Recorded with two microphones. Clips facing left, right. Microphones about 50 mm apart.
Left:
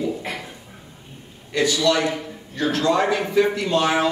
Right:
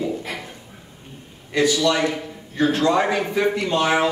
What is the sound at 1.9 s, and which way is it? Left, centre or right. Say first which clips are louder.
A man's voice: even; centre.